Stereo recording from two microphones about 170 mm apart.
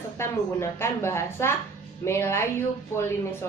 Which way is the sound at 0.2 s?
15° left (ahead or behind).